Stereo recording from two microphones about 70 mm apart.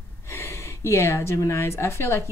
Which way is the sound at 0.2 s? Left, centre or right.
Left.